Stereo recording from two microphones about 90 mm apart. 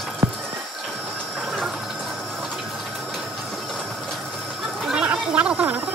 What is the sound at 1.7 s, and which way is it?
Fill, 5° right (ahead or behind).